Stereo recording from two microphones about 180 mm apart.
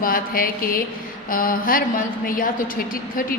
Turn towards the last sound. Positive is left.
turn(degrees=50)  # may be behind; listen again after turning